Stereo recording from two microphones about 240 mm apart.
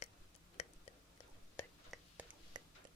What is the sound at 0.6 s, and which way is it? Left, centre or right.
Whispering, left.